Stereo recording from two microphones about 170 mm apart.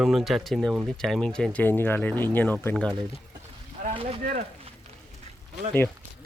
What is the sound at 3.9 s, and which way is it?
Speech, 35° right (ahead or behind).